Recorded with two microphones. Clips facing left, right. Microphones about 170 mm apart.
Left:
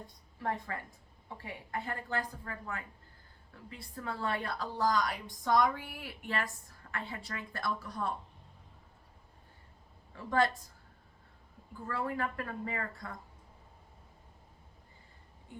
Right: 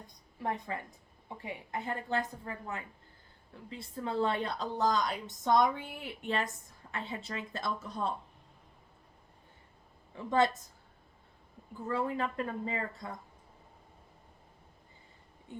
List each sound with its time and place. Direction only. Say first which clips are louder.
0.4 s a woman's voice: right 1 dB; 20° right (ahead or behind)
10.2 s a woman's voice: right 2 dB; 20° right (ahead or behind)
11.9 s a woman's voice: right 3 dB; 20° right (ahead or behind)